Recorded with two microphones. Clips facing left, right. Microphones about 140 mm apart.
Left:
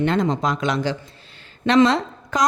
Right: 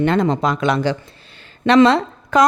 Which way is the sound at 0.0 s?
60° right (ahead or behind).